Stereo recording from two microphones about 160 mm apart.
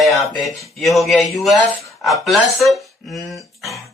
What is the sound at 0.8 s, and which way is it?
Speech, centre (ahead or behind).